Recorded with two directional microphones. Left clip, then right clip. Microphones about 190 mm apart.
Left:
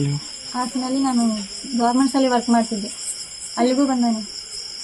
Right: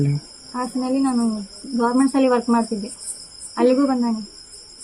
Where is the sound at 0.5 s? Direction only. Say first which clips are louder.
Right 1 dB; 5° right (ahead or behind).